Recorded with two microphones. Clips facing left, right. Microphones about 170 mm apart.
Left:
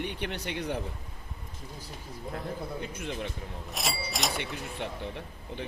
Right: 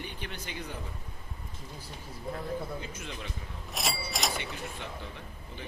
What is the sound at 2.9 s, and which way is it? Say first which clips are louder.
Speech: left 6 dB; 55° left (ahead or behind).